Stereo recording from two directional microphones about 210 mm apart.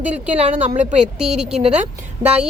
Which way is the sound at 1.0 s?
5° right (ahead or behind).